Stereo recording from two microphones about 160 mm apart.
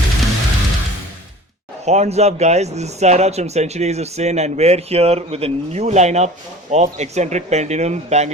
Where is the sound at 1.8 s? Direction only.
45° right (ahead or behind).